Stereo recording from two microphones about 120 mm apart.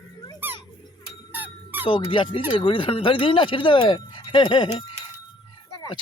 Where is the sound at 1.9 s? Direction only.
45° left (ahead or behind).